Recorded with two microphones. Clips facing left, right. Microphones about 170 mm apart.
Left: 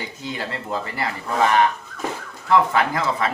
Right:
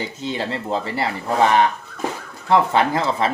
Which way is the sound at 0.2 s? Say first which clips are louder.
Right 4 dB; 25° right (ahead or behind).